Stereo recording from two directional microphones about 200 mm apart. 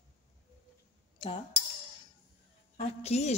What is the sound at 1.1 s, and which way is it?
Speech, 25° left (ahead or behind).